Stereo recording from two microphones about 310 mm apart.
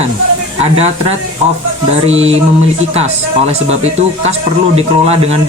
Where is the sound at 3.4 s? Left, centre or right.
Right.